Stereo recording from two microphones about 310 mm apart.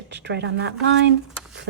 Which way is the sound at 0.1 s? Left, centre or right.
Right.